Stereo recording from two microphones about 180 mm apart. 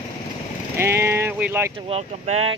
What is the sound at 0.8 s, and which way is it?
Speech, 15° right (ahead or behind).